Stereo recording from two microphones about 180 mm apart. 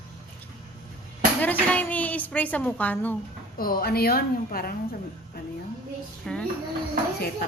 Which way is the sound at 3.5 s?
55° left (ahead or behind).